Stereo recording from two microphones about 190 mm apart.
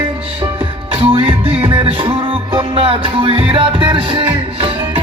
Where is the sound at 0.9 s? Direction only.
30° right (ahead or behind).